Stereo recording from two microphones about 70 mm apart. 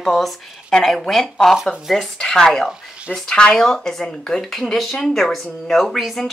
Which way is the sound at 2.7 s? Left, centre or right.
Centre.